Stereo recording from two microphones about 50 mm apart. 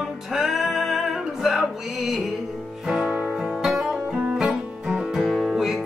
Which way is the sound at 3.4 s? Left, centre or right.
Centre.